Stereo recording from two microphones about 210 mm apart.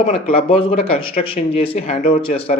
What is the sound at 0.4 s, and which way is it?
Speech, 25° left (ahead or behind).